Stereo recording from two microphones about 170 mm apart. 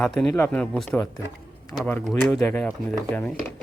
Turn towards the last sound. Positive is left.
turn(degrees=10)  # may be behind; listen again after turning